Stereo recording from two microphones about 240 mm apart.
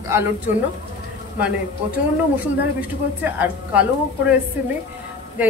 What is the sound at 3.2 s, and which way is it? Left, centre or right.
Speech, centre.